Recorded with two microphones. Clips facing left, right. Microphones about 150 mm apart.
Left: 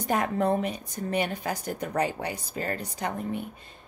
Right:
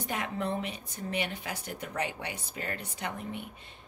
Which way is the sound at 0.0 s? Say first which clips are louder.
Left 8 dB; 45° left (ahead or behind).